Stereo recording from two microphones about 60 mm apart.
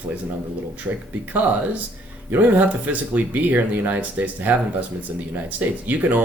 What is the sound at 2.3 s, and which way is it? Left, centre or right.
Speech, right.